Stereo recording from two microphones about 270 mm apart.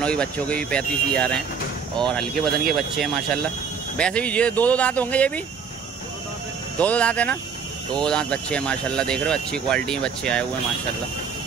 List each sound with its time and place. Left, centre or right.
0.0 s speech: centre
6.8 s speech: centre